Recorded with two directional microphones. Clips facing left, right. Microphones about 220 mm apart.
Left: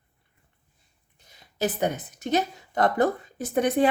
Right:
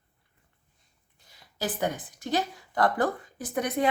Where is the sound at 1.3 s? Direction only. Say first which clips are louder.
Left 5 dB; 20° left (ahead or behind).